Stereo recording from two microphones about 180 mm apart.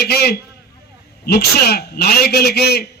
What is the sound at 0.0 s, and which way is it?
A man's voice, 65° left (ahead or behind).